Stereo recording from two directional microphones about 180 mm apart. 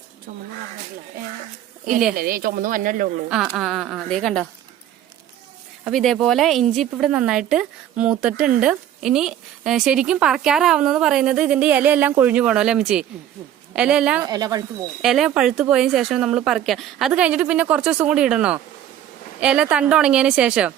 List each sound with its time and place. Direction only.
2.1 s speech: 55° right (ahead or behind)
3.2 s speech: 5° right (ahead or behind)
5.8 s speech: centre (ahead or behind)
14.3 s speech: 20° right (ahead or behind)
15.0 s speech: centre (ahead or behind)